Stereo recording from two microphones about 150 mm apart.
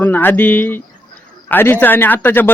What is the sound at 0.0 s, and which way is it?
Speech, 15° left (ahead or behind).